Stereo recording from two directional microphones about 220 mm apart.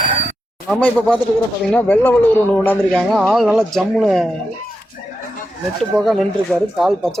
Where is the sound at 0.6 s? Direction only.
5° left (ahead or behind).